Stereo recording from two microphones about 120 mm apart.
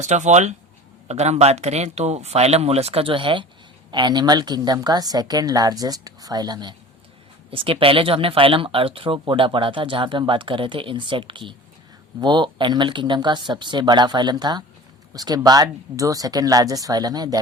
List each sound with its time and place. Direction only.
0.0 s a woman's voice: 75° right (ahead or behind); by 6.7 s 35° right (ahead or behind)
7.5 s a woman's voice: 50° right (ahead or behind); by 17.4 s 30° right (ahead or behind)